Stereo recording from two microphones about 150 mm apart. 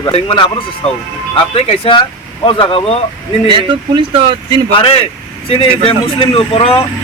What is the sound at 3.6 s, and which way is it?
Speech, 30° right (ahead or behind).